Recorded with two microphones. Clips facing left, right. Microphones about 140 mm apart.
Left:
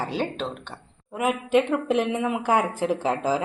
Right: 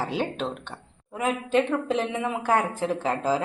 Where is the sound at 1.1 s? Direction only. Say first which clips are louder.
Left 2 dB; 10° left (ahead or behind).